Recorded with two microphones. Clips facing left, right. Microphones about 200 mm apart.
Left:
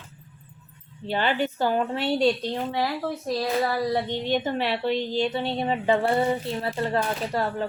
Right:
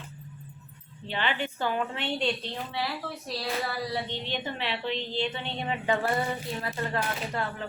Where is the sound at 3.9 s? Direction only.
45° left (ahead or behind); by 6.2 s 30° left (ahead or behind).